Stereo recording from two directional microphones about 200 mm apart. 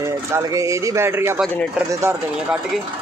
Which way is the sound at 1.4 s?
Centre (ahead or behind).